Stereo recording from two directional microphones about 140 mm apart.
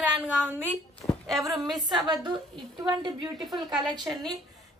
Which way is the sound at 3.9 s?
30° right (ahead or behind).